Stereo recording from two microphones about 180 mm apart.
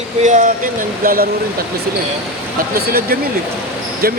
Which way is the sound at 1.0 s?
55° right (ahead or behind).